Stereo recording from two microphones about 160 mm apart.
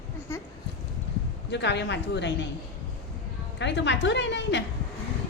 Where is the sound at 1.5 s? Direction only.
90° left.